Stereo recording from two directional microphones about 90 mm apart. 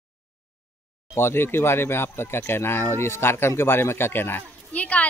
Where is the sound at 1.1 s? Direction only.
25° left (ahead or behind).